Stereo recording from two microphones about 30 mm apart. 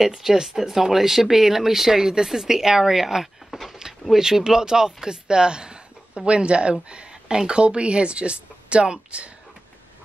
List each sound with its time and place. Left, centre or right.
0.0 s speech: centre
3.5 s a sound: centre
4.2 s speech: right